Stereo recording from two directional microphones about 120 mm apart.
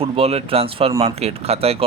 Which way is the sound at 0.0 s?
55° right (ahead or behind).